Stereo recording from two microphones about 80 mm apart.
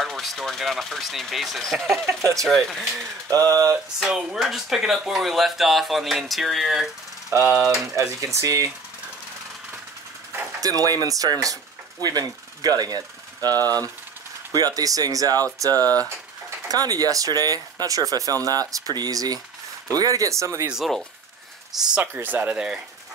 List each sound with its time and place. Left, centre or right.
0.0 s speech: centre
2.0 s speech: right
2.4 s speech: centre
3.3 s speech: right
4.0 s speech: centre
7.2 s ratchet: right
7.5 s speech: centre
7.9 s speech: right
10.6 s speech: right
20.7 s speech: centre
22.0 s speech: right